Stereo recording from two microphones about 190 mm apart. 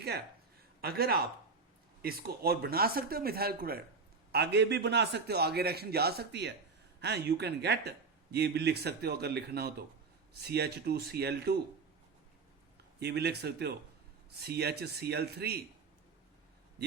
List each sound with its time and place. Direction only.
0.8 s speech: 55° right (ahead or behind)
13.0 s speech: 60° right (ahead or behind)